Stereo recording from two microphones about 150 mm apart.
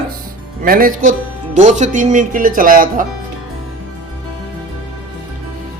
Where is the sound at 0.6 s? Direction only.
70° right (ahead or behind).